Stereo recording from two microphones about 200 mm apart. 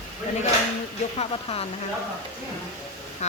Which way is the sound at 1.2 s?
30° left (ahead or behind).